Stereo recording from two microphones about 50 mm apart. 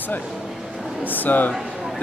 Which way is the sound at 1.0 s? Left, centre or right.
Left.